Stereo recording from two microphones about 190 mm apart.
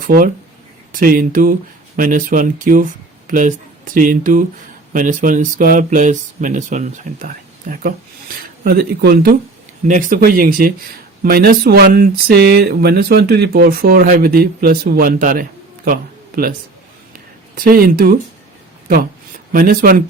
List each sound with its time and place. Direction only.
0.9 s speech: 45° right (ahead or behind)
9.8 s speech: 40° right (ahead or behind)
19.5 s speech: 50° right (ahead or behind)